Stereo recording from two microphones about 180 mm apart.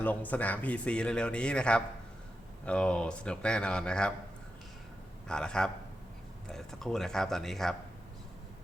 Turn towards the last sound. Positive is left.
turn(degrees=0)  # may be behind; listen again after turning